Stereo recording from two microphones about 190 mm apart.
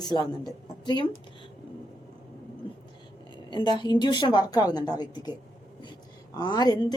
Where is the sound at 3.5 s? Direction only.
25° left (ahead or behind).